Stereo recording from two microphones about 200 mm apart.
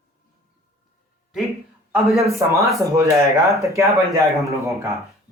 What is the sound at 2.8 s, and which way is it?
Speech, 15° right (ahead or behind).